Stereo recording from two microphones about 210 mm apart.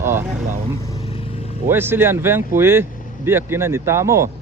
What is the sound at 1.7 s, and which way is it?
Speech, 10° right (ahead or behind).